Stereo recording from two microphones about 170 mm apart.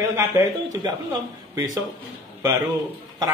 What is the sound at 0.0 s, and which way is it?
Speech, 15° right (ahead or behind).